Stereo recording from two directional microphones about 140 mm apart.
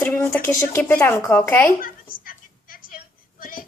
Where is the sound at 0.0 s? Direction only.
15° left (ahead or behind).